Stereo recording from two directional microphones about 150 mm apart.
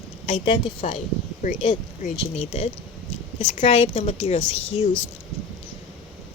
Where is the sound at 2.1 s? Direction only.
40° left (ahead or behind).